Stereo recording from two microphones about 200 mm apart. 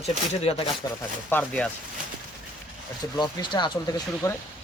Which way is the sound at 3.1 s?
20° left (ahead or behind).